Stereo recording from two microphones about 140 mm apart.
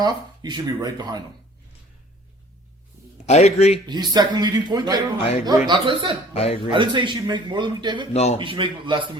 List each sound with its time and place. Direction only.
0.0 s speech: 30° right (ahead or behind)
3.2 s a man's voice: 50° left (ahead or behind)
3.8 s speech: 30° right (ahead or behind)
6.3 s a man's voice: 45° left (ahead or behind)
6.7 s speech: 35° right (ahead or behind)
8.1 s a man's voice: 50° left (ahead or behind)
8.4 s speech: 35° right (ahead or behind)